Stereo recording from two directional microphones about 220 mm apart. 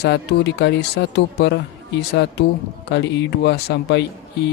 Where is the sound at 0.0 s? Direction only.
50° left (ahead or behind).